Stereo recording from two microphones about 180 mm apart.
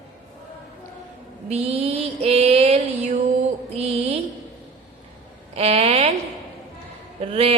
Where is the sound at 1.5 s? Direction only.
35° right (ahead or behind).